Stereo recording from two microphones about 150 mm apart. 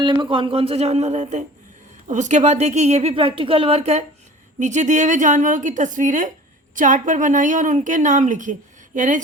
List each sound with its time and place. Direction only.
0.0 s a woman's voice: 30° right (ahead or behind); by 9.2 s 55° right (ahead or behind)